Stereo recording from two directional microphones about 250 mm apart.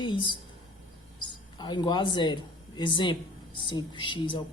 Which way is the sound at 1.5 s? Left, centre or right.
Centre.